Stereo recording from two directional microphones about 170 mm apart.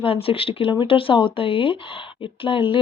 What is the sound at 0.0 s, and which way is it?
Speech, 35° left (ahead or behind).